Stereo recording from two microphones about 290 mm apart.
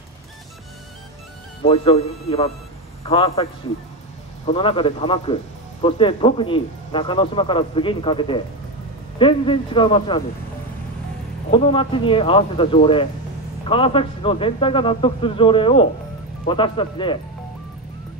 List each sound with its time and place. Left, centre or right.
1.6 s speech: centre
4.5 s speech: centre
11.5 s speech: centre